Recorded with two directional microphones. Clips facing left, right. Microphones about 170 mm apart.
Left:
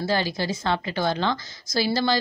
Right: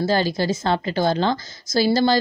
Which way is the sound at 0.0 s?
40° right (ahead or behind).